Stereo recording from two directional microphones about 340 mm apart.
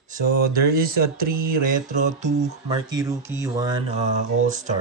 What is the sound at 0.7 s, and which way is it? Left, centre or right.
Speech, right.